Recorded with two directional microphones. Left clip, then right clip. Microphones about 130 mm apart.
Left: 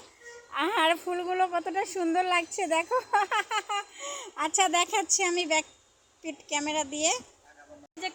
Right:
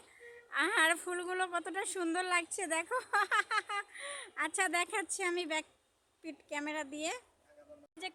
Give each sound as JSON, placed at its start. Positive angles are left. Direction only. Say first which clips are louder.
{"t": 0.5, "sound": "a woman's voice", "louder": "left 5 dB", "side_deg": -30}